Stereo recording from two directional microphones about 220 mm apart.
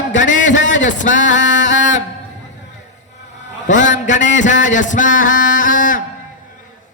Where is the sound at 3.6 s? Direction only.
35° left (ahead or behind).